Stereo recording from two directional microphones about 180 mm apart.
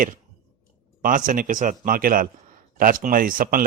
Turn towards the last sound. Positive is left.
turn(degrees=-50)  # may be behind; listen again after turning